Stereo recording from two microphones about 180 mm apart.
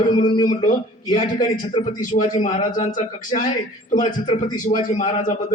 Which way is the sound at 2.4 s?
40° left (ahead or behind).